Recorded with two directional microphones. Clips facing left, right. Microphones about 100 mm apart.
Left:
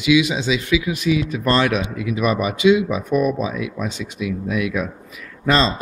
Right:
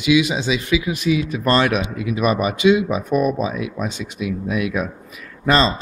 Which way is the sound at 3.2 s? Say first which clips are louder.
Even; 25° right (ahead or behind).